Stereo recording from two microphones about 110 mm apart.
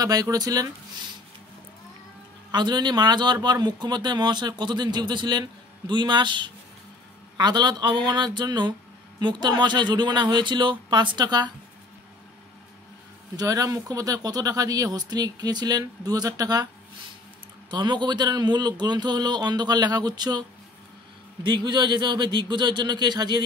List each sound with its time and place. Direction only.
0.0 s speech: 35° right (ahead or behind)
2.5 s speech: 40° right (ahead or behind)
13.4 s speech: 30° right (ahead or behind)
17.6 s speech: 45° right (ahead or behind)